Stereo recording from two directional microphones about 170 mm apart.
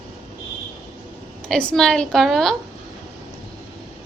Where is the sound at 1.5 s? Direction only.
5° left (ahead or behind).